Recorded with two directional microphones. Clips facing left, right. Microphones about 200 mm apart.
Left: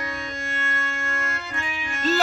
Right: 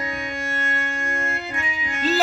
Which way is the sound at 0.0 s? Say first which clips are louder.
Right 3 dB; 20° right (ahead or behind).